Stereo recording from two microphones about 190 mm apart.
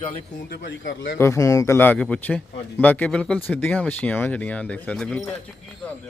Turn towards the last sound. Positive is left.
turn(degrees=5)  # may be behind; listen again after turning